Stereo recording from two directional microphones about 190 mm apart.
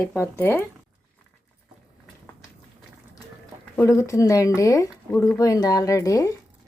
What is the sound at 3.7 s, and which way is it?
Speech, 15° left (ahead or behind).